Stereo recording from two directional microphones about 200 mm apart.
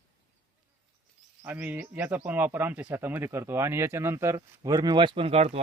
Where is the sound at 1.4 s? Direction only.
10° right (ahead or behind).